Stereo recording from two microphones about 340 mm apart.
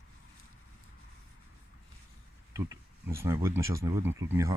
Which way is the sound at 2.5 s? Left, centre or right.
Centre.